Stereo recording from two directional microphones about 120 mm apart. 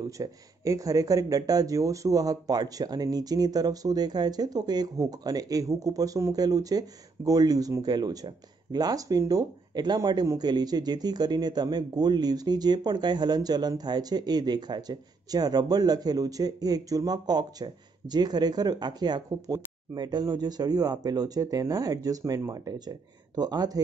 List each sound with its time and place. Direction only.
0.2 s speech: 30° right (ahead or behind)